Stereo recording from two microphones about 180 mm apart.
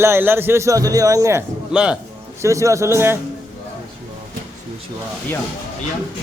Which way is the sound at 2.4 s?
15° right (ahead or behind).